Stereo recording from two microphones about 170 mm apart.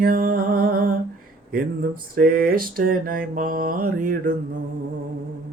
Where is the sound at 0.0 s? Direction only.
60° right (ahead or behind).